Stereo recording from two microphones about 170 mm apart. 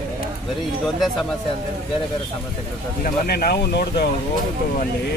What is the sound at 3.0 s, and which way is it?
Speech, 65° left (ahead or behind).